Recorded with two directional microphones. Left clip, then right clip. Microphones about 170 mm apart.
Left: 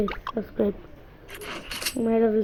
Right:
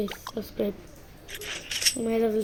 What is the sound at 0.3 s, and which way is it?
Speech, 20° left (ahead or behind).